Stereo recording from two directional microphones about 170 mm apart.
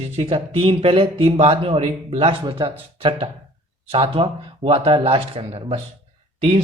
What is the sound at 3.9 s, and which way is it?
A man's voice, 35° right (ahead or behind).